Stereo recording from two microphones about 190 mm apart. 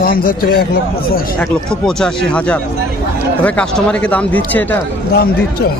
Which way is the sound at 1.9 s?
Centre (ahead or behind).